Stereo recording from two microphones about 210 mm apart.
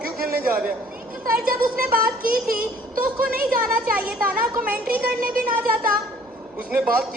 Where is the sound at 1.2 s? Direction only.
45° right (ahead or behind).